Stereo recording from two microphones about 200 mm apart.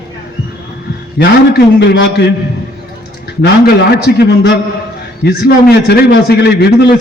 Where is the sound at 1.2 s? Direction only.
55° left (ahead or behind).